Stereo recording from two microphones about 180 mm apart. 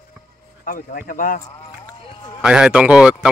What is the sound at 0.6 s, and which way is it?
Speech, 50° left (ahead or behind).